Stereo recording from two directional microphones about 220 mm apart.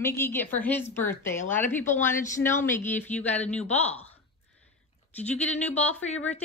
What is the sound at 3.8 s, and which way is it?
Speech, 30° left (ahead or behind).